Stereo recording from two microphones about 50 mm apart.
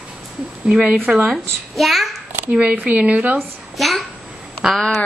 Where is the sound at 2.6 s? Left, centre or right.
Right.